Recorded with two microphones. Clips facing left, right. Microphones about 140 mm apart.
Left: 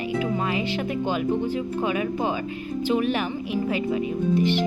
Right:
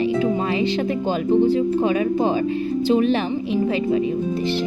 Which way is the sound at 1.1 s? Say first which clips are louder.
Right 9 dB; 30° right (ahead or behind).